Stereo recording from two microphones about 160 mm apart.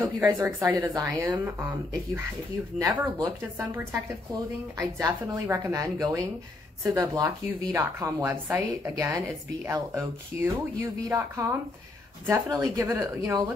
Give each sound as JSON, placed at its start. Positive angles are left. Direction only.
{"t": 0.0, "sound": "a woman's voice", "side_deg": -10}
{"t": 3.2, "sound": "speech", "side_deg": -15}